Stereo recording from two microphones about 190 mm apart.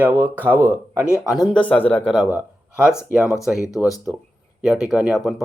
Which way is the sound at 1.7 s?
5° left (ahead or behind).